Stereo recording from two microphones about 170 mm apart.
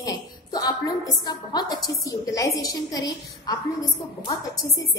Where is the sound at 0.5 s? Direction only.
25° left (ahead or behind).